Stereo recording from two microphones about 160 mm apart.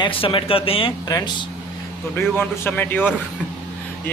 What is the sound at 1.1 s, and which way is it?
Speech, 25° left (ahead or behind).